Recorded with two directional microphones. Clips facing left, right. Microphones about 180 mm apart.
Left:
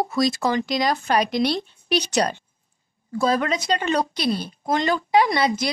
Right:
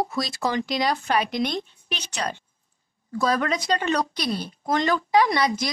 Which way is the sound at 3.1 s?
25° left (ahead or behind).